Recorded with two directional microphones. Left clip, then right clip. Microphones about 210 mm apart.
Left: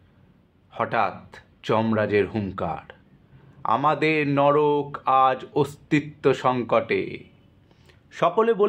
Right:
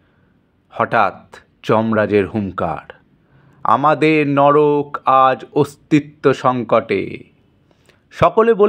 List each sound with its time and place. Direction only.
0.7 s a man's voice: 30° right (ahead or behind)